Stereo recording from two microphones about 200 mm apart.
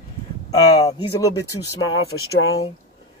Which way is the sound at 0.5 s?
20° left (ahead or behind).